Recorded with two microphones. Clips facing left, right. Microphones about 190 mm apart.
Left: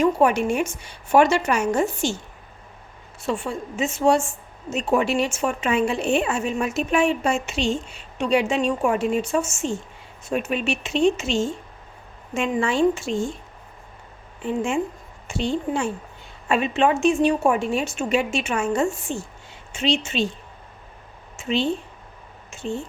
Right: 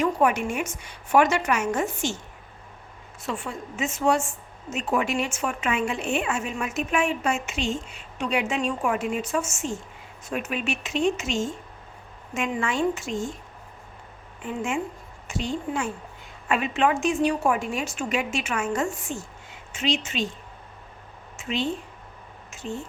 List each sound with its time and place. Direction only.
0.0 s a woman's voice: 30° left (ahead or behind)
3.2 s a woman's voice: 30° left (ahead or behind)
14.4 s a woman's voice: 30° left (ahead or behind)
21.3 s a sound: 30° left (ahead or behind)
22.4 s speech: 30° left (ahead or behind)